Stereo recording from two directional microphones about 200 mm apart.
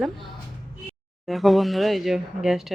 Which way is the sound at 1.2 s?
Centre (ahead or behind).